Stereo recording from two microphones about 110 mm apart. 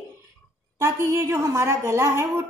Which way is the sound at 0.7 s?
25° right (ahead or behind).